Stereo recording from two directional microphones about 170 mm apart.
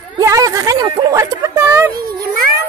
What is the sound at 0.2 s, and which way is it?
Speech, 20° right (ahead or behind).